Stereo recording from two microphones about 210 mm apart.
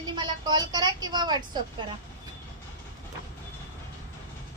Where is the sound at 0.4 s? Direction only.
20° right (ahead or behind).